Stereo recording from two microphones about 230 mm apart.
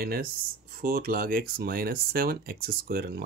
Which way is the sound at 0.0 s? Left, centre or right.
Right.